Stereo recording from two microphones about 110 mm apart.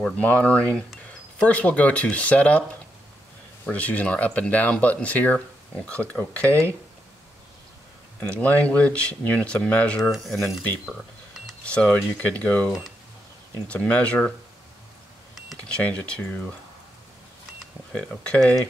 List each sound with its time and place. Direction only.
0.0 s speech: 15° left (ahead or behind)
3.6 s speech: 10° left (ahead or behind)
6.4 s speech: 25° right (ahead or behind)
8.4 s speech: 15° left (ahead or behind)
15.3 s cash register: centre (ahead or behind)
15.8 s speech: 10° left (ahead or behind)
17.9 s speech: 10° left (ahead or behind)